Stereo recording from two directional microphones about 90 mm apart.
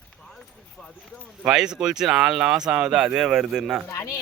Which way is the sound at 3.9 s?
25° left (ahead or behind).